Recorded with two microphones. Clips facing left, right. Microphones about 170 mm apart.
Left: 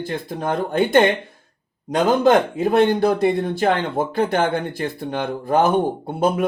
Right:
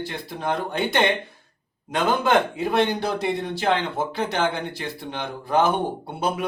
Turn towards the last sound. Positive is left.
turn(degrees=50)  # may be behind; listen again after turning